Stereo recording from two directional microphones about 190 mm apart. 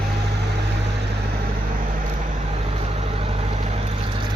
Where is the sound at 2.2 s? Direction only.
35° right (ahead or behind).